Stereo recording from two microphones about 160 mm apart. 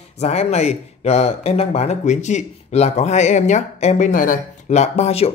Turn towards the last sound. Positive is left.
turn(degrees=40)  # may be behind; listen again after turning